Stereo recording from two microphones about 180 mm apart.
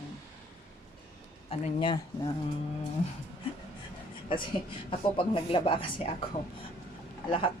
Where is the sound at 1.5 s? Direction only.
30° left (ahead or behind).